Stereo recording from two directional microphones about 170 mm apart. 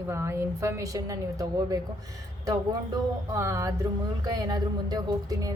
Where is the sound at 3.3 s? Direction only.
15° right (ahead or behind).